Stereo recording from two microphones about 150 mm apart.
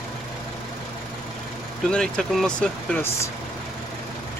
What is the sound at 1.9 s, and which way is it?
Speech, 5° left (ahead or behind).